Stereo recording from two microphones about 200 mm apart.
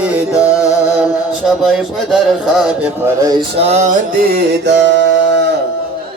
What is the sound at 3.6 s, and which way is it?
Mantra, 35° right (ahead or behind).